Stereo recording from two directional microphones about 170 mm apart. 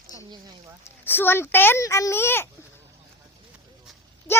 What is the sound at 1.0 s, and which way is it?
Speech, 10° left (ahead or behind).